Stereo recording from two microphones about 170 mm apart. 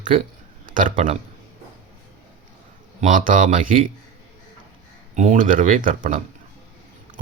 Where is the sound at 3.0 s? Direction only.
50° right (ahead or behind).